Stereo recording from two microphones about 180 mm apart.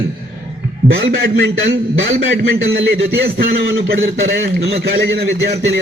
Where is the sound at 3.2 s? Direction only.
55° right (ahead or behind).